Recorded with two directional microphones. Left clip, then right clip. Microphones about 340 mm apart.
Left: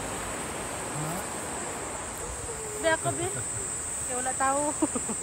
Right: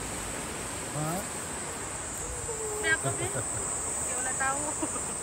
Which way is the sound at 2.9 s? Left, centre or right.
Centre.